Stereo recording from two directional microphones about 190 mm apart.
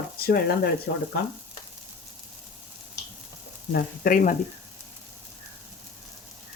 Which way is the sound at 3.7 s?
50° left (ahead or behind).